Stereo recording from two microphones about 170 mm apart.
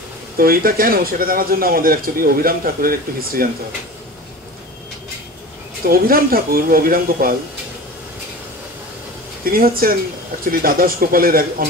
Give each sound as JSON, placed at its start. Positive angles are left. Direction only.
{"t": 0.4, "sound": "speech", "side_deg": -60}
{"t": 5.9, "sound": "speech", "side_deg": -60}
{"t": 9.4, "sound": "speech", "side_deg": -60}